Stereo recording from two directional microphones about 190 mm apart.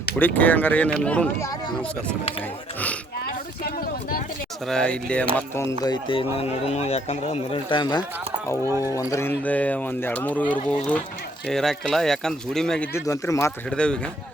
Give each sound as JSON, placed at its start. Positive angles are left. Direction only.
{"t": 0.2, "sound": "speech", "side_deg": 10}
{"t": 3.6, "sound": "a sound", "side_deg": 50}
{"t": 4.6, "sound": "speech", "side_deg": 5}
{"t": 5.8, "sound": "speech", "side_deg": 25}
{"t": 13.1, "sound": "speech", "side_deg": 15}
{"t": 13.7, "sound": "speech", "side_deg": 5}